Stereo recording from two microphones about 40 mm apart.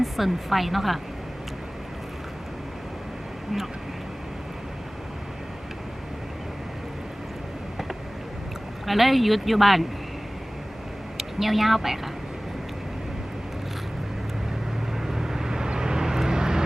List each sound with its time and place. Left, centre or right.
0.0 s speech: centre
8.9 s speech: centre
11.2 s speech: centre
14.9 s vehicle: centre